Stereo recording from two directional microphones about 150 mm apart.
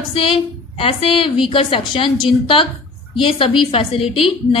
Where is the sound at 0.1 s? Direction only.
35° left (ahead or behind).